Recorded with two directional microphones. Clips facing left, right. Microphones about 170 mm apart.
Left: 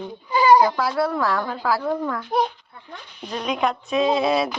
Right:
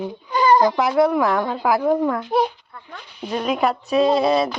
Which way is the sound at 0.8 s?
20° right (ahead or behind).